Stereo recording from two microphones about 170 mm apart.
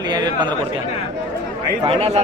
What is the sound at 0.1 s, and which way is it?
Chatter, 25° right (ahead or behind).